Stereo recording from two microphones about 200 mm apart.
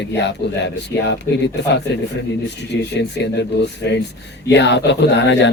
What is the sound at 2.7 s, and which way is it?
Speech, 60° left (ahead or behind).